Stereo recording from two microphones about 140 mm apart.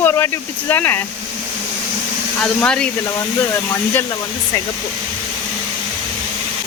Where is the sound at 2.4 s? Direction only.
5° left (ahead or behind).